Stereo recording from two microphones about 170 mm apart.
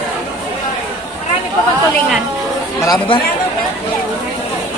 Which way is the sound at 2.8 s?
25° left (ahead or behind).